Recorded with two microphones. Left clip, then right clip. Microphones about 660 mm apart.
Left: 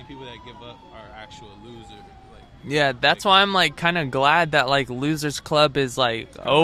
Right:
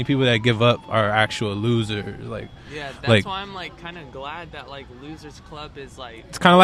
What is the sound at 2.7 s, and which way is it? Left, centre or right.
Speech, left.